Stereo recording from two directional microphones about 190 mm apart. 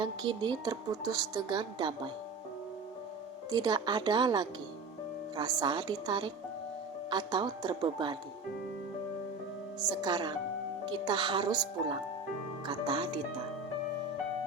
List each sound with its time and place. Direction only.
0.0 s speech: 25° right (ahead or behind)
3.5 s speech: 20° right (ahead or behind)
9.8 s speech: 20° right (ahead or behind)